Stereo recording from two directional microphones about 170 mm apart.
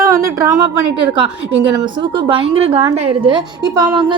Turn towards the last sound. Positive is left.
turn(degrees=-25)  # may be behind; listen again after turning